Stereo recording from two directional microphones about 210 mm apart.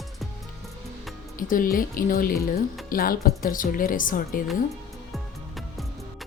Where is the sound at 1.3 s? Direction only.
40° left (ahead or behind).